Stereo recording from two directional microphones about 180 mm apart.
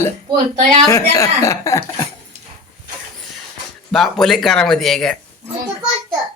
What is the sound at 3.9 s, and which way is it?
Speech, centre (ahead or behind).